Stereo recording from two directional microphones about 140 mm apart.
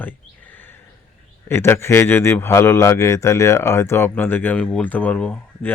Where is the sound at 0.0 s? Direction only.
10° left (ahead or behind).